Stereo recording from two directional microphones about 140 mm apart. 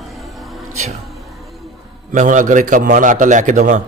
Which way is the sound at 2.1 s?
65° right (ahead or behind).